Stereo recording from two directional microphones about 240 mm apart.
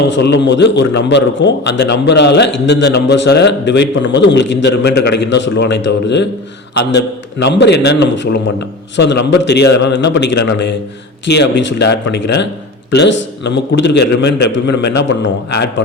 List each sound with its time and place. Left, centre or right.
0.1 s a man's voice: left